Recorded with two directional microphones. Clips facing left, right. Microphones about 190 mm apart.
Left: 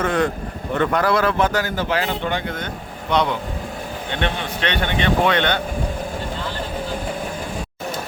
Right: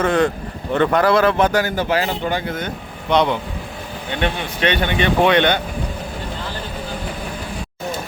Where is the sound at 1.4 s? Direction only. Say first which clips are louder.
Right 3 dB; 15° right (ahead or behind).